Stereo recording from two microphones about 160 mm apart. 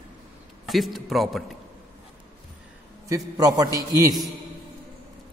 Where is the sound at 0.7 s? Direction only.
Centre (ahead or behind).